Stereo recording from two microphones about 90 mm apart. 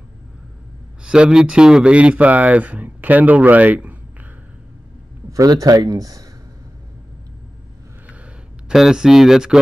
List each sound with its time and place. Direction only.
1.0 s speech: 10° right (ahead or behind)
5.3 s speech: 40° right (ahead or behind)
8.6 s speech: 5° right (ahead or behind)